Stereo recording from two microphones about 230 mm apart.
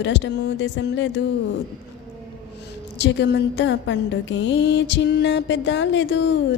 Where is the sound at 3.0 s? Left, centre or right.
Left.